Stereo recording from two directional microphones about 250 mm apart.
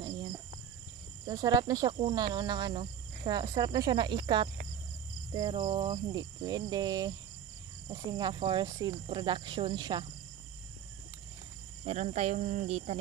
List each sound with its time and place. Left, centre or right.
1.2 s speech: centre
11.8 s speech: right